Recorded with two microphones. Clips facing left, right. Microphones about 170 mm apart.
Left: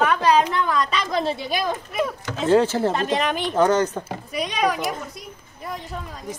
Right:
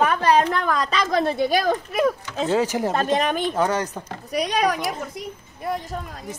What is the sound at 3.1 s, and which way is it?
Speech, 45° right (ahead or behind).